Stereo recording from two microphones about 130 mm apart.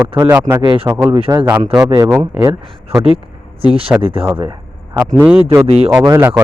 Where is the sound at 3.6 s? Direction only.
45° right (ahead or behind).